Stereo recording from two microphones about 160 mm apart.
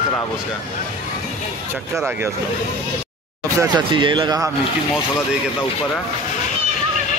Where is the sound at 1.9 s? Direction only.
15° right (ahead or behind).